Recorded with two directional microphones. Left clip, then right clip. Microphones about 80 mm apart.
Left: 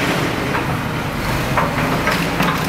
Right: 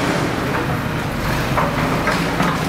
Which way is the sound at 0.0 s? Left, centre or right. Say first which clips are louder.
Left 1 dB; left.